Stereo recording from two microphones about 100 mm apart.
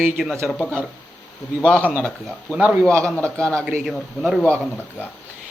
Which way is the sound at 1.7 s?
15° left (ahead or behind).